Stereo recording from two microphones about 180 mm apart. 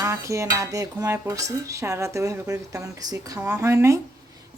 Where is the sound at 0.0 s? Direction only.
15° right (ahead or behind).